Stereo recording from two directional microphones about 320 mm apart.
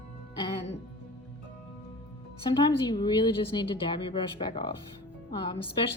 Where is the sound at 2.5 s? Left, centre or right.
Centre.